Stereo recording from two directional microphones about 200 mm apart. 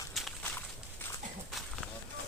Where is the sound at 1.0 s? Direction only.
10° left (ahead or behind).